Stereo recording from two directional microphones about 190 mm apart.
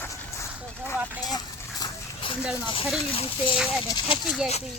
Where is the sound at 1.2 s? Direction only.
20° left (ahead or behind).